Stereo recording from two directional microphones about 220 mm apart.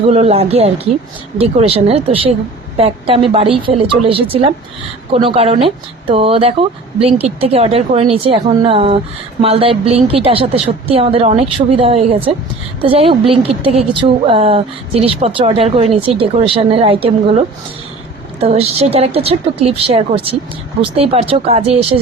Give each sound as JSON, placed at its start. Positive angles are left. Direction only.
{"t": 0.1, "sound": "speech", "side_deg": -30}